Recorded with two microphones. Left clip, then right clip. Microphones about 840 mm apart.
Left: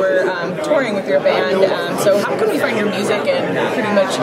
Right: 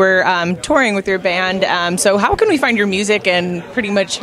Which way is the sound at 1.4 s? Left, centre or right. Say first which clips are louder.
Left 1 dB; right.